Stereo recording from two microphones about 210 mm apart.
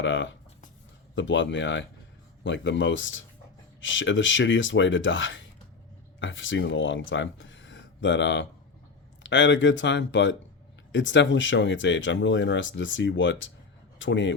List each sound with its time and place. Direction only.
0.0 s speech: 60° left (ahead or behind)